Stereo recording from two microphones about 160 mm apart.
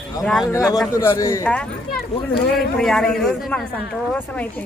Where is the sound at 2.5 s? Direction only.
Centre (ahead or behind).